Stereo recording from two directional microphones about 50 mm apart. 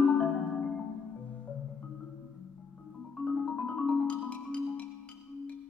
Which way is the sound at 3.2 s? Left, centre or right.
Centre.